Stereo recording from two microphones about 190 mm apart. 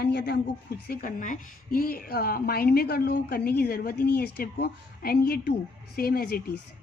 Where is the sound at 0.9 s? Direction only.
45° left (ahead or behind).